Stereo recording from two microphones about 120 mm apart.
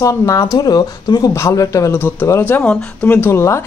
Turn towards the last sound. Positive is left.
turn(degrees=25)  # may be behind; listen again after turning